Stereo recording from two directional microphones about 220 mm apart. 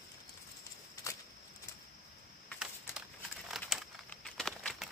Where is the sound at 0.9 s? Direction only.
15° left (ahead or behind).